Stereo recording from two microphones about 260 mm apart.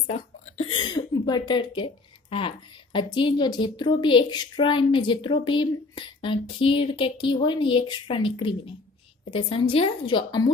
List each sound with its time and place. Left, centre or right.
0.7 s speech: centre